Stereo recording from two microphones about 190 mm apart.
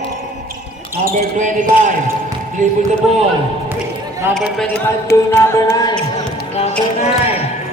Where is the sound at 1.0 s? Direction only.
40° right (ahead or behind).